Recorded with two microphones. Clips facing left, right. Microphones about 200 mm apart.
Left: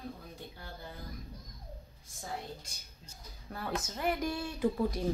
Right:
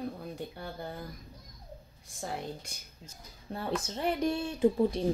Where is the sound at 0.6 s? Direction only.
65° right (ahead or behind).